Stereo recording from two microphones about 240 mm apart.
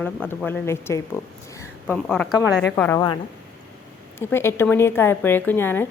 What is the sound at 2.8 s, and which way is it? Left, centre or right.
A woman's voice, centre.